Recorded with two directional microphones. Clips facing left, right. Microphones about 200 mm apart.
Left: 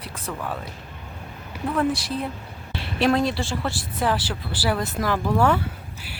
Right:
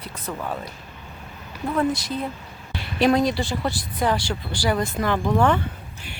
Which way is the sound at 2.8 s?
Centre (ahead or behind).